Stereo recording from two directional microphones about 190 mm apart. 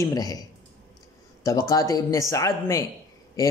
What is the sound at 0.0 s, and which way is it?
A man's voice, 20° left (ahead or behind).